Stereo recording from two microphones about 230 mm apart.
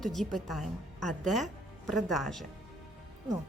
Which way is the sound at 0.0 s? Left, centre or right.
Centre.